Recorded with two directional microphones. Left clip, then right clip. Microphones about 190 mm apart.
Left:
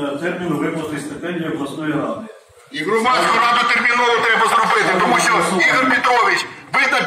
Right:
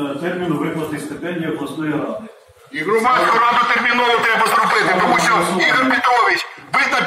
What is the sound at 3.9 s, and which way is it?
Speech, 45° right (ahead or behind).